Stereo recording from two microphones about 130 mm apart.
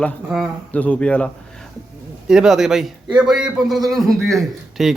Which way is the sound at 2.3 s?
5° right (ahead or behind).